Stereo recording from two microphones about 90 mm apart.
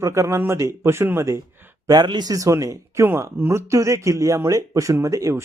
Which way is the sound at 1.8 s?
50° right (ahead or behind).